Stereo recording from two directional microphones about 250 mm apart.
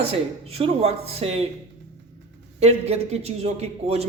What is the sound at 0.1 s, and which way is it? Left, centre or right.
Speech, right.